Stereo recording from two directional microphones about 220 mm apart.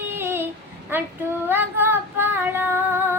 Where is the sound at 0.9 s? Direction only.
10° right (ahead or behind).